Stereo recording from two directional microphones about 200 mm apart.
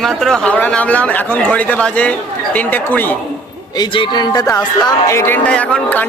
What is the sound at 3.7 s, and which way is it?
Music, 25° left (ahead or behind).